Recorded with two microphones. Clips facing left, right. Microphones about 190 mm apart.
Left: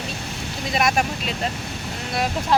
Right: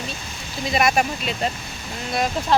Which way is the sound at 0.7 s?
Centre (ahead or behind).